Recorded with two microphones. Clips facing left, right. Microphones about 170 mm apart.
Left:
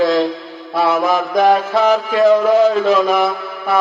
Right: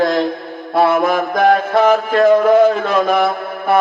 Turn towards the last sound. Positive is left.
turn(degrees=-55)  # may be behind; listen again after turning